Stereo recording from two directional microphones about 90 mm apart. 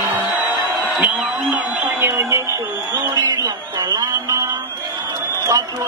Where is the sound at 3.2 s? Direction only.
40° right (ahead or behind).